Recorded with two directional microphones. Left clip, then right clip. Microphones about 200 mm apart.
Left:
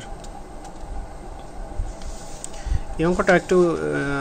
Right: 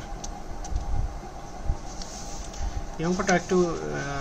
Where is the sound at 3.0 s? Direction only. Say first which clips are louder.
Left 7 dB; 50° left (ahead or behind).